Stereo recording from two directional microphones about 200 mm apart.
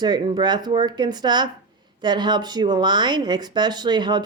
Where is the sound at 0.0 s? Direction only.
20° right (ahead or behind).